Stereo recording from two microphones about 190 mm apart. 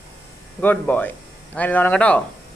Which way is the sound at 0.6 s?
10° left (ahead or behind).